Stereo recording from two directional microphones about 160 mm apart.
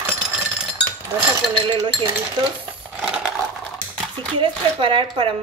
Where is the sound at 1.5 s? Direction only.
30° right (ahead or behind).